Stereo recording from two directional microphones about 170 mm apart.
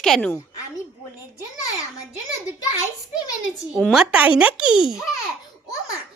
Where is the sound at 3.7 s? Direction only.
5° right (ahead or behind).